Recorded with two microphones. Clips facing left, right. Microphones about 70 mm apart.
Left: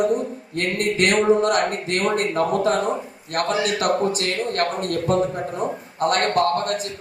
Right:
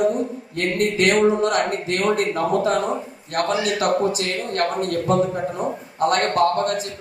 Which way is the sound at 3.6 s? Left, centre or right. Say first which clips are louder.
Even; left.